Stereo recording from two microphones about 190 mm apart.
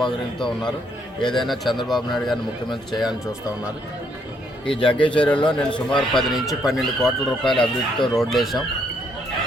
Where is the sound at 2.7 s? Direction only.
20° left (ahead or behind).